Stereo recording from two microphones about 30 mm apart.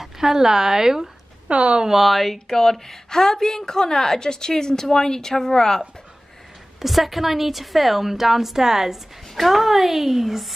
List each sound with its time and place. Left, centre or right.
0.0 s speech: centre
1.5 s speech: right
2.0 s speech: centre
2.3 s a woman's voice: centre
6.8 s a woman's voice: centre